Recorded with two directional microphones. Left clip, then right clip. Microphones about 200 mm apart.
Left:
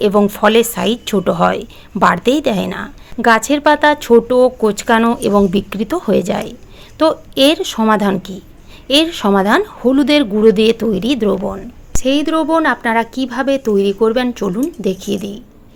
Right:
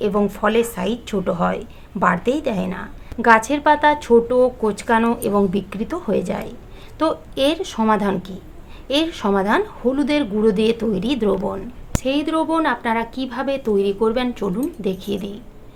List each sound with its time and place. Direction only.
0.0 s speech: 40° left (ahead or behind); by 11.6 s 25° left (ahead or behind)
12.0 s speech: 35° left (ahead or behind)